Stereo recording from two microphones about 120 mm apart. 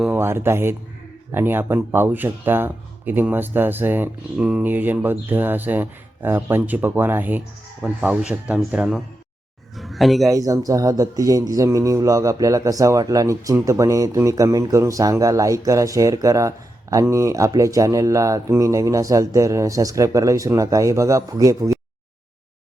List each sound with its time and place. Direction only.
0.1 s speech: 20° right (ahead or behind); by 10.3 s centre (ahead or behind)
10.3 s speech: 30° right (ahead or behind)